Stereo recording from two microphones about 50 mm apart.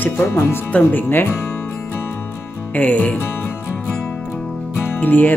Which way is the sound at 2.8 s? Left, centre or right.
Left.